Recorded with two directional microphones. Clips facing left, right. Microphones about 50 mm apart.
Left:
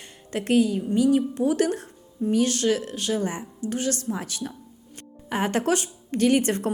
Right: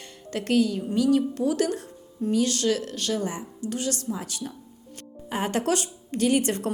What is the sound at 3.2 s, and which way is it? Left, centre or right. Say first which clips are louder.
A woman's voice: left 2 dB; left.